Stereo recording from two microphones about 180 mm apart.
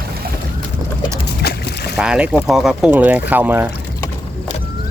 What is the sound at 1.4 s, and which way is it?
Boat, 65° left (ahead or behind).